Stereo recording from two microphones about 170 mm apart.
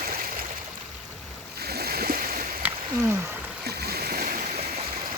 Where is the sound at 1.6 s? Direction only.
65° right (ahead or behind).